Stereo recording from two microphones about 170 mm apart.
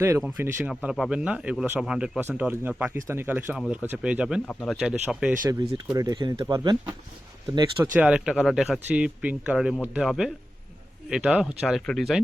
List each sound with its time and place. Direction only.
0.0 s a man's voice: 15° right (ahead or behind)
5.5 s speech: 25° right (ahead or behind)
7.9 s a man's voice: 5° right (ahead or behind)